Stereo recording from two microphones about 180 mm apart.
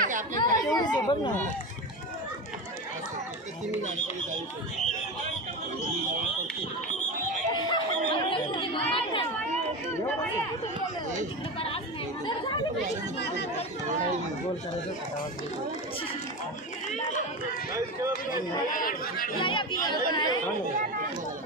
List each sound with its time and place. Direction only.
0.0 s chatter: 45° right (ahead or behind)
0.4 s speech: 20° left (ahead or behind)
7.5 s chatter: 25° left (ahead or behind)
16.9 s speech: 40° left (ahead or behind)
17.7 s speech: 15° right (ahead or behind)
18.7 s speech: 50° left (ahead or behind)
19.3 s speech: 25° left (ahead or behind)